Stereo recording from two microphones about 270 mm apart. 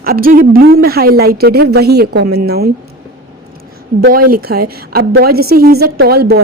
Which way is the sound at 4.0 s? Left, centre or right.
Right.